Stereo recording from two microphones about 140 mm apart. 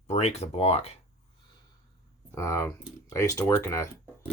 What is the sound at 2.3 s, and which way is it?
Speech, 20° left (ahead or behind).